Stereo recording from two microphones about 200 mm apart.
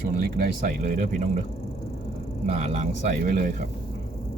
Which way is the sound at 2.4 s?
35° right (ahead or behind).